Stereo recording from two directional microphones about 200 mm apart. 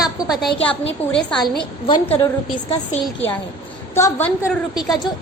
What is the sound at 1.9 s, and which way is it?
Speech, 25° left (ahead or behind).